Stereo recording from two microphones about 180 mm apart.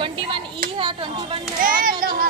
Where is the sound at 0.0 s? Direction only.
25° right (ahead or behind).